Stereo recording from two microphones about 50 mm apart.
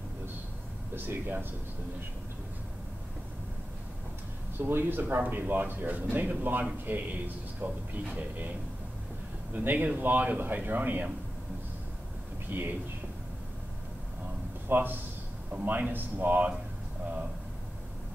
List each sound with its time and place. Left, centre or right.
0.9 s speech: right
4.6 s a man's voice: right
9.5 s a man's voice: right
12.4 s speech: right
14.7 s a man's voice: right